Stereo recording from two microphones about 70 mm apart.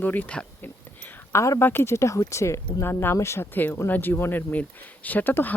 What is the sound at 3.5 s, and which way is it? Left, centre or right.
Speech, left.